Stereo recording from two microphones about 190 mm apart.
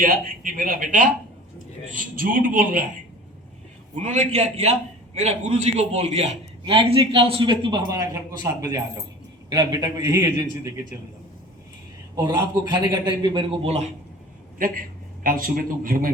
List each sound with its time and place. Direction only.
0.0 s speech: 50° right (ahead or behind)
3.9 s a man's voice: 40° right (ahead or behind); by 10.4 s 20° right (ahead or behind)
12.1 s a man's voice: 20° right (ahead or behind)
14.6 s a man's voice: 45° right (ahead or behind)